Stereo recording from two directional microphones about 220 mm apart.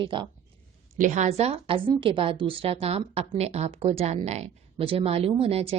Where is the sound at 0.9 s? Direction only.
35° right (ahead or behind).